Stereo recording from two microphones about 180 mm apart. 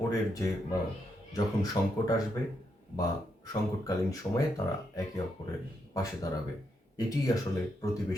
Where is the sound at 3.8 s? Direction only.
20° left (ahead or behind).